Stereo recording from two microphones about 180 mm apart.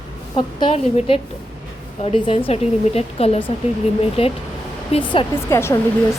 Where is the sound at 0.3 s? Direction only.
30° left (ahead or behind).